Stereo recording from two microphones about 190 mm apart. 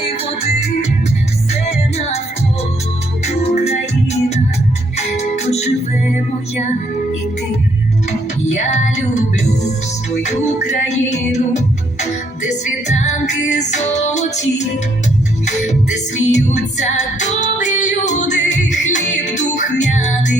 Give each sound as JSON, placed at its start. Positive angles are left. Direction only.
{"t": 0.1, "sound": "music", "side_deg": 35}
{"t": 3.2, "sound": "music", "side_deg": 35}
{"t": 10.2, "sound": "music", "side_deg": 35}
{"t": 16.3, "sound": "female singing", "side_deg": 40}
{"t": 19.8, "sound": "music", "side_deg": 40}